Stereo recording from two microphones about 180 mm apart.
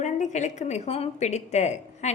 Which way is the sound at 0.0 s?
40° left (ahead or behind).